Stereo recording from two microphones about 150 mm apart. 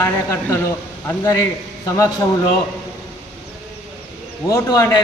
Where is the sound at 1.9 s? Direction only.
20° left (ahead or behind).